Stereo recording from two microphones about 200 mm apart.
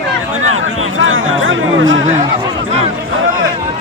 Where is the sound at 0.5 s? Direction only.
90° right.